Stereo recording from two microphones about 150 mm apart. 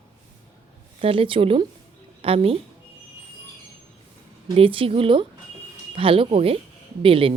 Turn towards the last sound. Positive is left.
turn(degrees=-35)  # may be behind; listen again after turning